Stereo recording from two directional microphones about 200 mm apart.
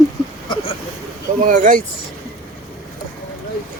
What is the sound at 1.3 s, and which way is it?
Speech, 40° right (ahead or behind).